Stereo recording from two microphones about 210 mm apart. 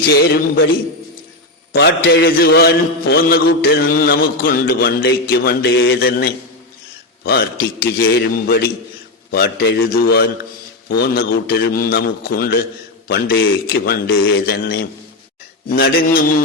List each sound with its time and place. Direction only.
0.1 s a man's voice: 45° left (ahead or behind)
1.7 s a man's voice: 50° left (ahead or behind)
7.9 s a man's voice: 50° left (ahead or behind)